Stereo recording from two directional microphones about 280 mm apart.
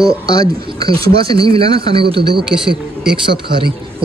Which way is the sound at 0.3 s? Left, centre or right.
Centre.